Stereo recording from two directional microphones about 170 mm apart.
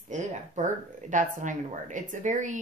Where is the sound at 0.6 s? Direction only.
50° right (ahead or behind).